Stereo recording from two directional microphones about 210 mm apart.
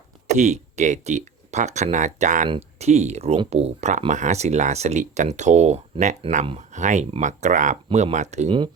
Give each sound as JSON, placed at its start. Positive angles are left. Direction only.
{"t": 0.3, "sound": "speech", "side_deg": -35}